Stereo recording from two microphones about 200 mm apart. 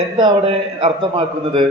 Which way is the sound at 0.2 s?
25° right (ahead or behind).